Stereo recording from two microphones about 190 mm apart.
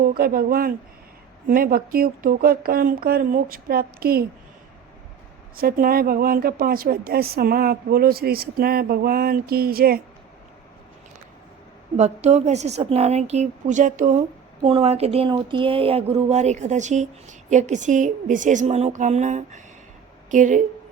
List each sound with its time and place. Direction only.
0.0 s a woman's voice: 50° right (ahead or behind)
5.5 s a woman's voice: 50° right (ahead or behind)
11.9 s speech: 35° right (ahead or behind)